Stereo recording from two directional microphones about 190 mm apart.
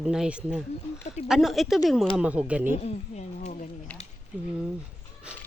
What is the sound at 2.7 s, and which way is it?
Speech, 35° left (ahead or behind).